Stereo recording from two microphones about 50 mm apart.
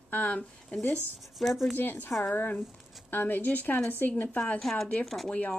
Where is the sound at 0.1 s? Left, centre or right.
Left.